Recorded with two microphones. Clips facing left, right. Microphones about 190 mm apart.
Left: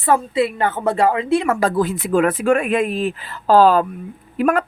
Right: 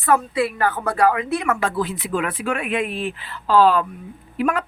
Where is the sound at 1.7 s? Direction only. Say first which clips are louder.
Left 6 dB; 45° left (ahead or behind).